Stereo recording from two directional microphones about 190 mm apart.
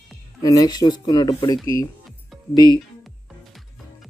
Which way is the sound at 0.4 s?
20° left (ahead or behind).